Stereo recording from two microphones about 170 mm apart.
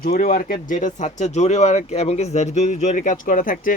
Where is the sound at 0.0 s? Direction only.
60° left (ahead or behind).